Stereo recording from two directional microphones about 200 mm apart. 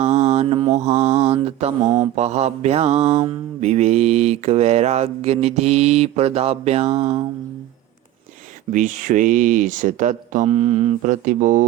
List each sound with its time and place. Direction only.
0.0 s mantra: 35° right (ahead or behind)
8.7 s mantra: 40° right (ahead or behind)